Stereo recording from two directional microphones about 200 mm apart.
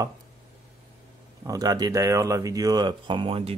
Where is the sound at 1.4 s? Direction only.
20° right (ahead or behind).